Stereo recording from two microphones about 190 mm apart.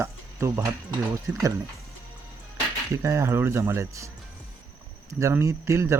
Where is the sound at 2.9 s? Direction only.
15° right (ahead or behind).